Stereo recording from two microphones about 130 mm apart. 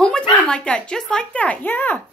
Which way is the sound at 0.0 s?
5° left (ahead or behind).